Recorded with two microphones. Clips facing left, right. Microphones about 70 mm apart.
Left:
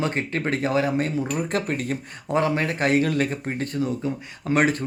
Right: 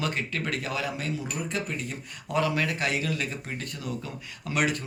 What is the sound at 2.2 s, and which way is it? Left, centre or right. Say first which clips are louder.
Speech: left 4 dB; left.